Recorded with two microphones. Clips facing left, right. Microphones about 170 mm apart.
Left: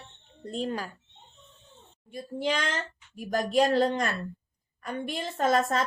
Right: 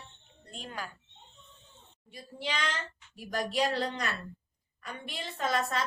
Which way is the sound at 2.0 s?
50° left (ahead or behind).